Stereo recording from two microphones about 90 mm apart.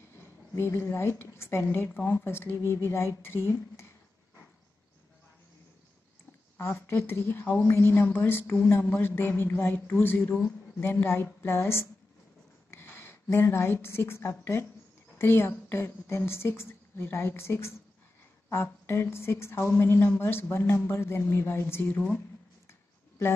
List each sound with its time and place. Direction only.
0.2 s a woman's voice: 25° left (ahead or behind)
6.6 s a woman's voice: 25° left (ahead or behind)
22.7 s a sound: 30° left (ahead or behind)